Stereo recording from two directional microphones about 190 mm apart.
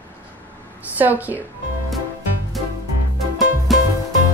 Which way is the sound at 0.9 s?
10° right (ahead or behind).